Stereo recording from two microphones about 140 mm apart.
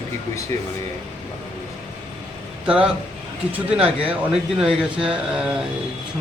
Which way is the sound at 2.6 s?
5° right (ahead or behind).